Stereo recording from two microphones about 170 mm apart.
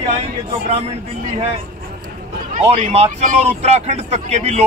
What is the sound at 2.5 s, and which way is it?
Speech, 45° right (ahead or behind).